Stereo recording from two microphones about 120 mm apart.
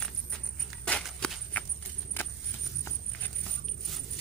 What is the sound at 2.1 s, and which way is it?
Keys jangling, 15° left (ahead or behind).